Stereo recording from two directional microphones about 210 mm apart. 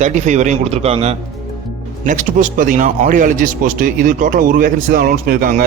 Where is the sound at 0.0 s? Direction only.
35° right (ahead or behind).